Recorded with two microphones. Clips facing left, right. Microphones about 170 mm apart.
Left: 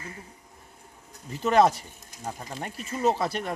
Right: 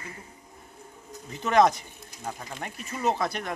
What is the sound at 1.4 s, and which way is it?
Speech, 5° left (ahead or behind).